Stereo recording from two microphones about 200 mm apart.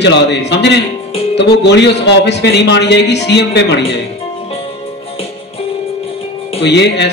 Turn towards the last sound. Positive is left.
turn(degrees=60)  # may be behind; listen again after turning